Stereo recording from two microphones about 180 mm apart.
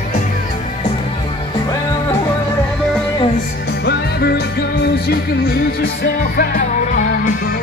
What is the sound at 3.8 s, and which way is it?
Music, 60° left (ahead or behind).